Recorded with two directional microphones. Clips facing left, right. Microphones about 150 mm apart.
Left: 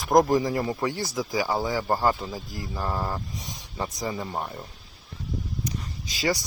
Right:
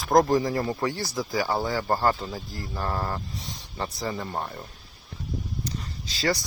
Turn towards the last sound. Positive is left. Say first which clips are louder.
# even
turn(degrees=10)  # may be behind; listen again after turning